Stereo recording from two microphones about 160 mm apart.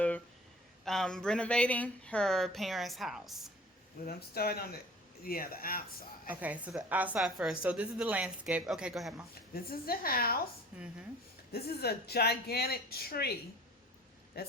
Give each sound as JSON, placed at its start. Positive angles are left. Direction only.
{"t": 0.9, "sound": "speech", "side_deg": 5}
{"t": 4.0, "sound": "a woman's voice", "side_deg": 75}
{"t": 6.4, "sound": "a woman's voice", "side_deg": -10}
{"t": 9.6, "sound": "a woman's voice", "side_deg": 70}
{"t": 10.7, "sound": "speech", "side_deg": -5}
{"t": 11.5, "sound": "speech", "side_deg": 85}
{"t": 14.3, "sound": "speech", "side_deg": 80}